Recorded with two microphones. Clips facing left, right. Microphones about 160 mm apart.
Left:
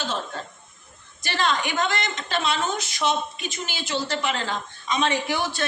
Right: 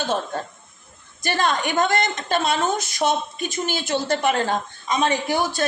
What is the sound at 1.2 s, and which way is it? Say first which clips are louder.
A woman's voice: right 3 dB; 45° right (ahead or behind).